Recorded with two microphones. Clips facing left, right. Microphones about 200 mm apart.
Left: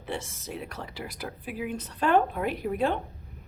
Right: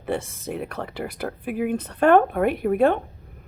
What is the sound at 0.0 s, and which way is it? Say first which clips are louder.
Speech: right 8 dB; 55° right (ahead or behind).